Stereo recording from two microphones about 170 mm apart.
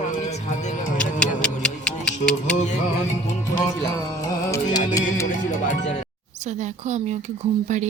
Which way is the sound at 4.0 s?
20° left (ahead or behind).